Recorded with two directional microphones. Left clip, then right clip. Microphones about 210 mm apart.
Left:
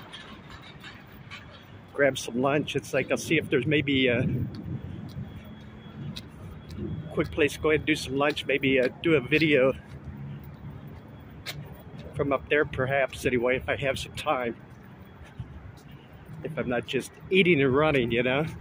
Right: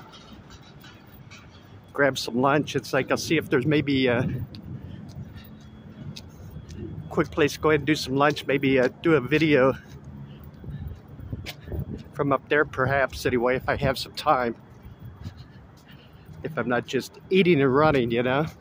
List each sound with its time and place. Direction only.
2.0 s speech: 15° right (ahead or behind)
7.2 s speech: 20° right (ahead or behind)
12.2 s speech: 20° right (ahead or behind)
16.4 s speech: 20° right (ahead or behind)